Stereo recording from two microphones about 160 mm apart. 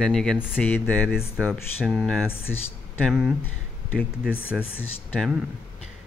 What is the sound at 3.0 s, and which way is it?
Speech, 5° right (ahead or behind).